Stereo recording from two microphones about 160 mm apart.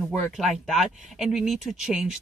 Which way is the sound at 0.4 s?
Centre (ahead or behind).